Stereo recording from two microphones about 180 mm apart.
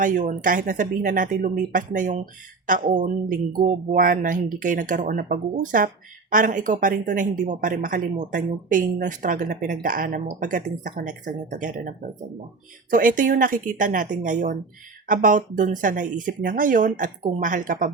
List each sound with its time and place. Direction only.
0.0 s speech: 45° right (ahead or behind)
12.9 s speech: 50° right (ahead or behind)